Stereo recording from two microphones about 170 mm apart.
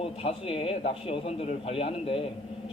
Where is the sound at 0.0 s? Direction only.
35° left (ahead or behind).